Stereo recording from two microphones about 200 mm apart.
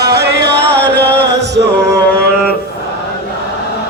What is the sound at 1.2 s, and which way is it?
Music, 60° right (ahead or behind).